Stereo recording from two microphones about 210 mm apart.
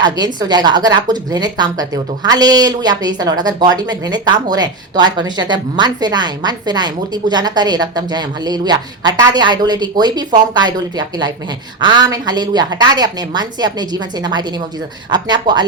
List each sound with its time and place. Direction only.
0.3 s speech: 20° right (ahead or behind)